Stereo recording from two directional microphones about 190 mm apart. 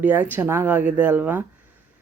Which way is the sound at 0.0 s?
10° right (ahead or behind).